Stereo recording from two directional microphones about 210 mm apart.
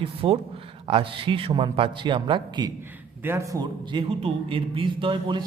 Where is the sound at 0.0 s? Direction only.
25° right (ahead or behind).